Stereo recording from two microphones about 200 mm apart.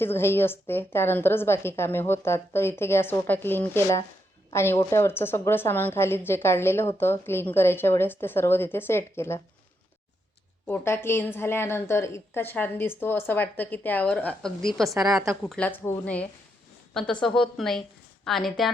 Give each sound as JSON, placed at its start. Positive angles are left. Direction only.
{"t": 0.0, "sound": "a woman's voice", "side_deg": 10}
{"t": 10.7, "sound": "a woman's voice", "side_deg": 10}